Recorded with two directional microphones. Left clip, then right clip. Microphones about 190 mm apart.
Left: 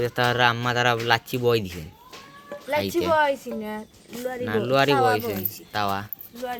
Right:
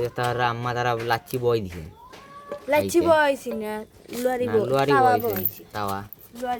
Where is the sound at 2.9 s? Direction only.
55° right (ahead or behind).